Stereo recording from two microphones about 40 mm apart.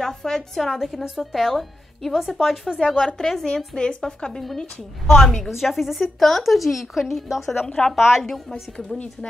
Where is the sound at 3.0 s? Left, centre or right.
Centre.